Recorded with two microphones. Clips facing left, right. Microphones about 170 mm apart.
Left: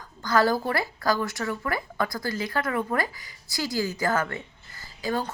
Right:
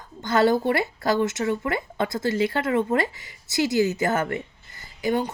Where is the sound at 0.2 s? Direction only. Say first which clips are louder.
Right 3 dB; 25° right (ahead or behind).